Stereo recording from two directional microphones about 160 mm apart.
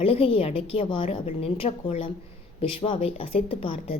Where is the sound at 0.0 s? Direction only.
35° left (ahead or behind).